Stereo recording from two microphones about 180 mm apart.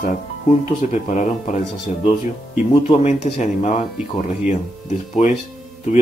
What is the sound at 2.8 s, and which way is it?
Speech, 35° left (ahead or behind).